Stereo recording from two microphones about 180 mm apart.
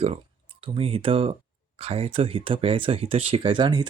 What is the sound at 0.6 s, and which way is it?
Speech, 30° right (ahead or behind).